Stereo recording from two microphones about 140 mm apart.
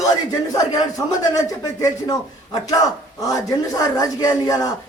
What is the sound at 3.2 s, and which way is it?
A man's voice, 25° left (ahead or behind).